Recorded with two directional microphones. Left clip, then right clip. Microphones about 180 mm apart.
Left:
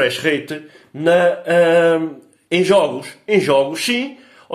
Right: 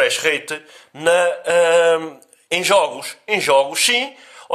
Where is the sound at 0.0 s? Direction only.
30° right (ahead or behind).